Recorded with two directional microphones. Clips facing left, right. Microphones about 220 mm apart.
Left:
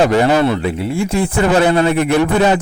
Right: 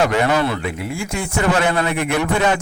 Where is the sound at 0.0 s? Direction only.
30° left (ahead or behind).